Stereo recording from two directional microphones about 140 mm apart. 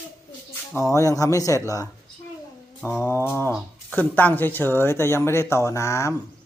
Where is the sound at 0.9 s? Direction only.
25° left (ahead or behind).